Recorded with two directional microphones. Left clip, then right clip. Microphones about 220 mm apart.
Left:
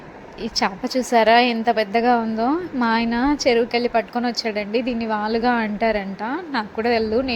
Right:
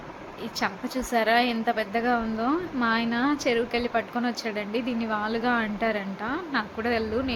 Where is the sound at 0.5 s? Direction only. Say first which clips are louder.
Left 8 dB; 25° left (ahead or behind).